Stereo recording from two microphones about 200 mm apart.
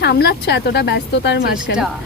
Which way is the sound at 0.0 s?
55° left (ahead or behind).